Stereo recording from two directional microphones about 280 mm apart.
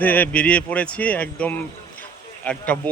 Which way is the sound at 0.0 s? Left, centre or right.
Centre.